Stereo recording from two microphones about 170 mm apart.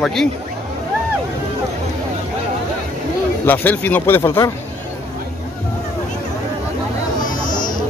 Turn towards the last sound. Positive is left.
turn(degrees=50)  # may be behind; listen again after turning